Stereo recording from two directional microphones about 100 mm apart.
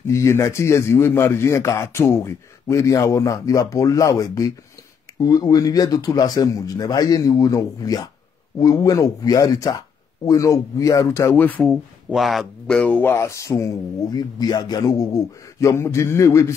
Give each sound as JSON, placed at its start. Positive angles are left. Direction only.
{"t": 0.0, "sound": "a man's voice", "side_deg": 30}
{"t": 11.6, "sound": "speech", "side_deg": 0}
{"t": 13.1, "sound": "speech", "side_deg": 30}